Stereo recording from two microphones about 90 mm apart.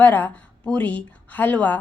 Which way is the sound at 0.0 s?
20° left (ahead or behind).